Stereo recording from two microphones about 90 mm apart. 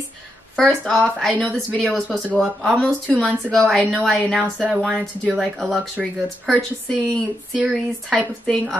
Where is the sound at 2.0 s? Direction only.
15° left (ahead or behind).